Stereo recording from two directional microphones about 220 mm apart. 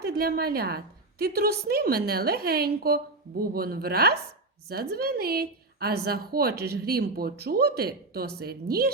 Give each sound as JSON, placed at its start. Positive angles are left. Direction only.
{"t": 0.0, "sound": "a woman's voice", "side_deg": -45}